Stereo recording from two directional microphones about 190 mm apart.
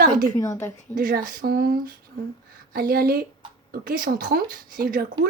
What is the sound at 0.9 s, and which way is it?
Speech, 50° right (ahead or behind).